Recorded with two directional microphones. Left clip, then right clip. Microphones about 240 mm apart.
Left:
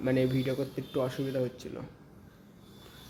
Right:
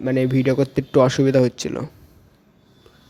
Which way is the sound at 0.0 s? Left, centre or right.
Right.